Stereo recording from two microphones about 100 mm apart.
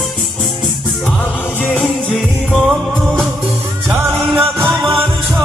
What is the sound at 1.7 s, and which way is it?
Music, 5° left (ahead or behind).